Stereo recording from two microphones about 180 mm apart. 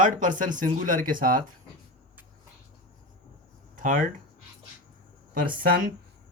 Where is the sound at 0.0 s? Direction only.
45° right (ahead or behind).